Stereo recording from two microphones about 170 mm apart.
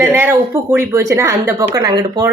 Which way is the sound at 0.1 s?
10° right (ahead or behind).